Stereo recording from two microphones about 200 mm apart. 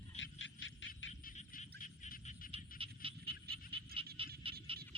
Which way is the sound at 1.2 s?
45° left (ahead or behind).